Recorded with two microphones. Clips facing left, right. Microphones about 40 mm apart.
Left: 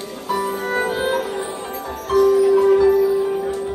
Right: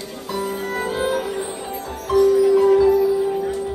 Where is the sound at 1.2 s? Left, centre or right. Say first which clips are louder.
Left 1 dB; centre.